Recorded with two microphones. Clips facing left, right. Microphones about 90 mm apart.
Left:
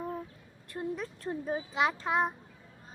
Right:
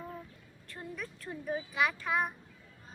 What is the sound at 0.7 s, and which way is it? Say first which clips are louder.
A child's voice: left 7 dB; 20° left (ahead or behind).